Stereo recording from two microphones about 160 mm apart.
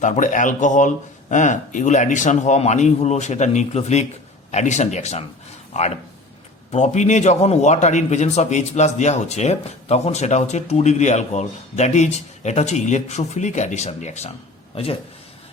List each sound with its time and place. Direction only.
0.0 s a man's voice: 50° left (ahead or behind)